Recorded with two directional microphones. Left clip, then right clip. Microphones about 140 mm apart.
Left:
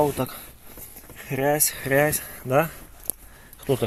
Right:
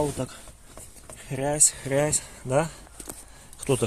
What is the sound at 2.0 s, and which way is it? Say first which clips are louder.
Speech: left 3 dB; centre (ahead or behind).